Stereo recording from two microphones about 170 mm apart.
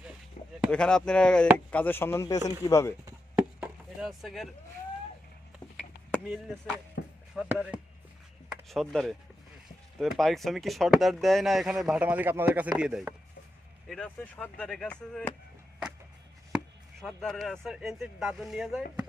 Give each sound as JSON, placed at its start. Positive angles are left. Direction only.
{"t": 0.7, "sound": "speech", "side_deg": 5}
{"t": 3.3, "sound": "chop", "side_deg": -5}
{"t": 7.0, "sound": "chop", "side_deg": 90}
{"t": 7.3, "sound": "speech", "side_deg": -5}
{"t": 13.8, "sound": "speech", "side_deg": 5}
{"t": 17.0, "sound": "speech", "side_deg": 0}